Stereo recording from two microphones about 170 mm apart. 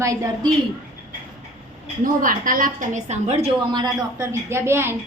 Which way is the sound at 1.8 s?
55° right (ahead or behind).